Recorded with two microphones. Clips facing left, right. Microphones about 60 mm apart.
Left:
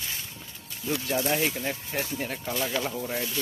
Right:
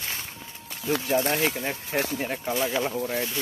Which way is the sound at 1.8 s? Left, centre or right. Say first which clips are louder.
Right 5 dB; right.